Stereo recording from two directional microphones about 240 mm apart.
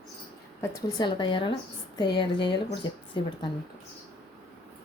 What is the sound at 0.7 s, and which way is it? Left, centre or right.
Speech, centre.